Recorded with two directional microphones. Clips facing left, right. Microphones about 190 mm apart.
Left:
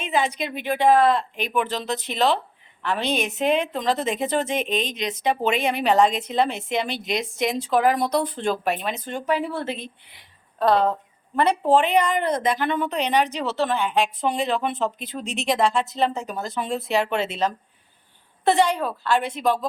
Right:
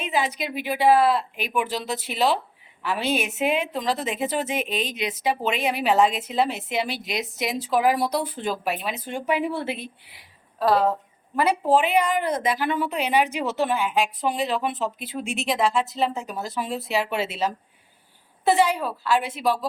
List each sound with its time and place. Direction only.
0.0 s a woman's voice: 5° right (ahead or behind)